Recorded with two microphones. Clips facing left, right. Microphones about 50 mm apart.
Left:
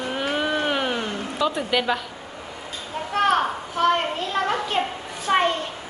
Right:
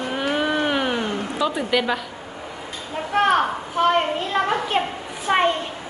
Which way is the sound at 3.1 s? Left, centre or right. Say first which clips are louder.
Right 2 dB; centre.